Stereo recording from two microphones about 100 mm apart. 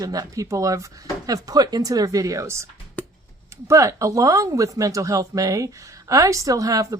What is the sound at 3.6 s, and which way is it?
Speech, 35° right (ahead or behind).